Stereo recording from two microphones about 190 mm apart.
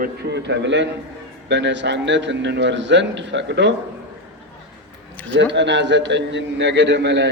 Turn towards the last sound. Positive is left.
turn(degrees=-70)  # may be behind; listen again after turning